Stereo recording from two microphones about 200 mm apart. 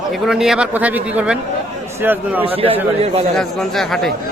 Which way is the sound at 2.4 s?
30° right (ahead or behind).